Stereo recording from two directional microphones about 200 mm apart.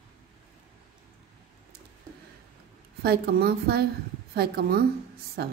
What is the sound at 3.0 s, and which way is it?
A woman's voice, 50° right (ahead or behind).